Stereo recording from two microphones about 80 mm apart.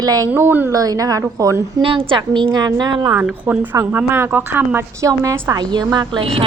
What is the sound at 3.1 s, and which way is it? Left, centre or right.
Speech, right.